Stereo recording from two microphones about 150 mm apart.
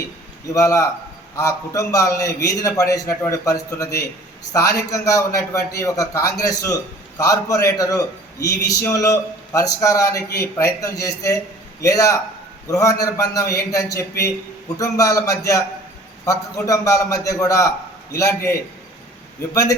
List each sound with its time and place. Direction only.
0.5 s a man's voice: 20° left (ahead or behind)